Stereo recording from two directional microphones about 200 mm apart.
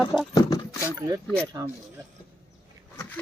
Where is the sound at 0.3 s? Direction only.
20° left (ahead or behind).